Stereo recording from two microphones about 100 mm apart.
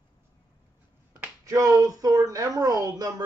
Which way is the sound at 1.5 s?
35° right (ahead or behind).